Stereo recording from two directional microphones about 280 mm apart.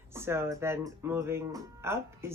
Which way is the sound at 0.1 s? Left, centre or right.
Centre.